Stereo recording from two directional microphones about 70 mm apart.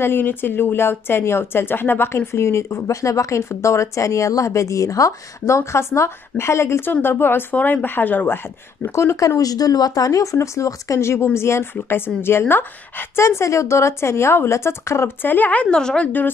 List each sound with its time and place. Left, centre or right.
0.0 s a woman's voice: left
5.6 s a woman's voice: left
8.9 s speech: left
9.4 s a woman's voice: left
13.4 s a woman's voice: left
15.3 s speech: left